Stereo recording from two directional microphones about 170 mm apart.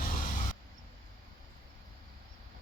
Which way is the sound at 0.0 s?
50° left (ahead or behind).